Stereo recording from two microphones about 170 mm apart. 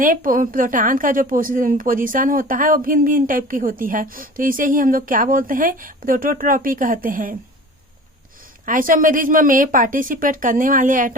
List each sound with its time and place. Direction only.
0.0 s a woman's voice: 55° right (ahead or behind)
8.6 s a woman's voice: 50° right (ahead or behind)